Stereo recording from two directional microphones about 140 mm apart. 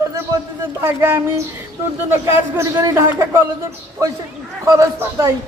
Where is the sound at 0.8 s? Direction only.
15° right (ahead or behind).